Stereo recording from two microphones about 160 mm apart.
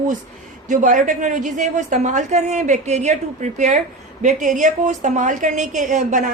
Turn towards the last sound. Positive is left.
turn(degrees=-50)  # may be behind; listen again after turning